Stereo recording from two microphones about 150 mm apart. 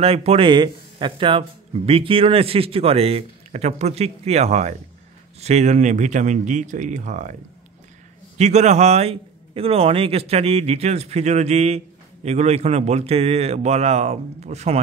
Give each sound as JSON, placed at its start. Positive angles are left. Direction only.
{"t": 0.0, "sound": "a man's voice", "side_deg": -45}
{"t": 0.5, "sound": "a man's voice", "side_deg": -30}
{"t": 8.4, "sound": "a man's voice", "side_deg": -50}